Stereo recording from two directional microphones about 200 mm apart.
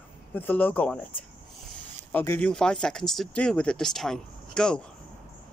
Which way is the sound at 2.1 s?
10° left (ahead or behind).